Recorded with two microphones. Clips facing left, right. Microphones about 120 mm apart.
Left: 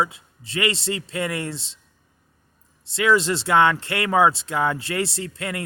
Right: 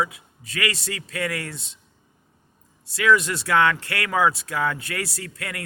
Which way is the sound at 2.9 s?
25° left (ahead or behind).